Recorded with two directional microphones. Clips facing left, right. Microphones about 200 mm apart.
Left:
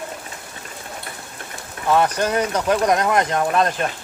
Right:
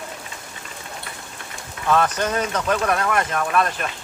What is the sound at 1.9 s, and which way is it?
Speech, 10° left (ahead or behind).